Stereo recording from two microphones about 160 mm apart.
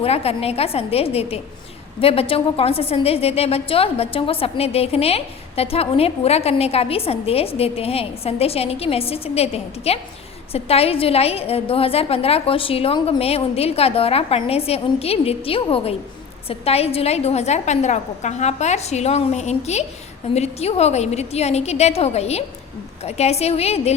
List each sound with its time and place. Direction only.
0.0 s a woman's voice: 40° left (ahead or behind)